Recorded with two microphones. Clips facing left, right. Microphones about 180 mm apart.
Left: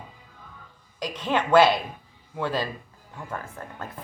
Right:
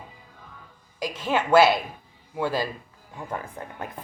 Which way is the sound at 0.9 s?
5° right (ahead or behind).